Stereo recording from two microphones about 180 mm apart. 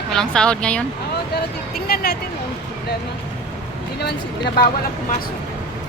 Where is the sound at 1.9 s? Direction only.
60° left (ahead or behind).